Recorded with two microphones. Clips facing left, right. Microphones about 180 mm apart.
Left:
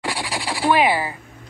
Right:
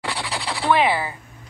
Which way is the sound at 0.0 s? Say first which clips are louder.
Left 2 dB; 10° left (ahead or behind).